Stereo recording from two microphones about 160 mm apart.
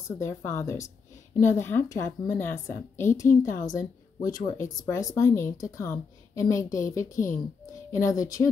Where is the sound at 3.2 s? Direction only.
55° left (ahead or behind).